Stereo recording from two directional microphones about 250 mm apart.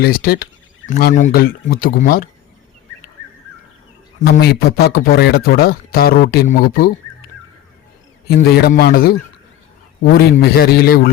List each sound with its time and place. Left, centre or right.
0.0 s speech: left
4.3 s speech: left
8.3 s speech: left